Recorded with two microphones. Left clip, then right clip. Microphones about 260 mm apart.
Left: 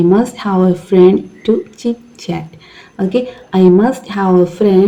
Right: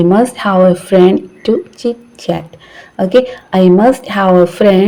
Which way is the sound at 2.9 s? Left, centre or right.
Right.